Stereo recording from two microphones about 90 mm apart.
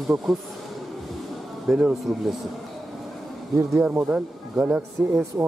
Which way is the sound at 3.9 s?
20° right (ahead or behind).